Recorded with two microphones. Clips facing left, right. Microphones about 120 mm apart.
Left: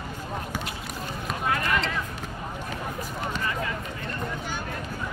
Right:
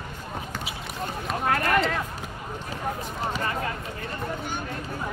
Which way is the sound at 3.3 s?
40° right (ahead or behind).